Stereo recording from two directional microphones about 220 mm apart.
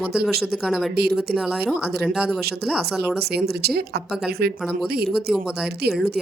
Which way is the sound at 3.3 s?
45° right (ahead or behind).